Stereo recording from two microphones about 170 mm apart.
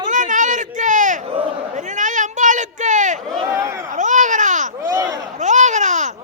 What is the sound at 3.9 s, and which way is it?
Babbling, 45° right (ahead or behind).